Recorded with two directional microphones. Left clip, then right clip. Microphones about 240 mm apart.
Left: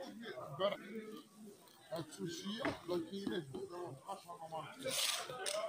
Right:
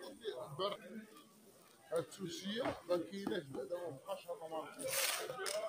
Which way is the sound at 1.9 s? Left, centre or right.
Right.